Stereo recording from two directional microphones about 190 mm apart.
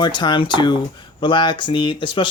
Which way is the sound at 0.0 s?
25° left (ahead or behind).